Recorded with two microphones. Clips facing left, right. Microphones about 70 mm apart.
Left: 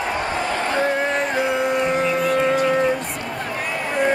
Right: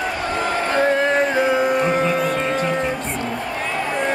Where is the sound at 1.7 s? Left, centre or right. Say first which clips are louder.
Right 2 dB; right.